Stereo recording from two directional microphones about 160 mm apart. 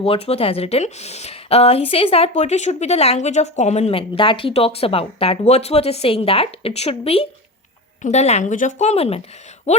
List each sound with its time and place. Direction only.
0.0 s a woman's voice: 40° left (ahead or behind)